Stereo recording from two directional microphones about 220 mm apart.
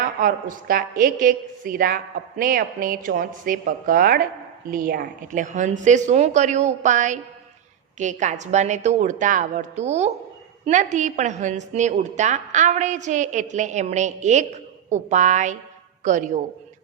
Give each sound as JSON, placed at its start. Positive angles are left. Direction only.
{"t": 0.0, "sound": "a woman's voice", "side_deg": -40}